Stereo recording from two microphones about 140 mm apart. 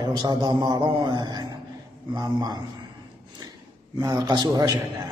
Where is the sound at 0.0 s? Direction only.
30° right (ahead or behind).